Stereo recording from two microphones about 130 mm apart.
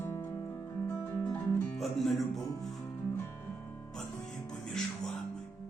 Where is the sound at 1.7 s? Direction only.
Centre (ahead or behind).